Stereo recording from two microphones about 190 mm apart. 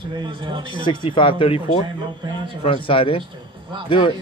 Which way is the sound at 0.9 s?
25° left (ahead or behind).